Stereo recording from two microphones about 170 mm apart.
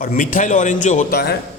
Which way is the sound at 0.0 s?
55° left (ahead or behind).